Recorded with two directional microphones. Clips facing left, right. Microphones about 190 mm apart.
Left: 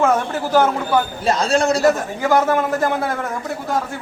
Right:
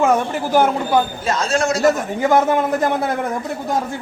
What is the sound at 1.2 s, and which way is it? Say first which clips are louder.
Speech: left 2 dB; 35° left (ahead or behind).